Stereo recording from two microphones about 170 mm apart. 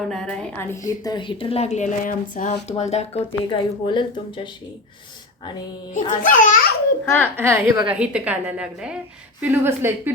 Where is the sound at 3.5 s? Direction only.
30° left (ahead or behind).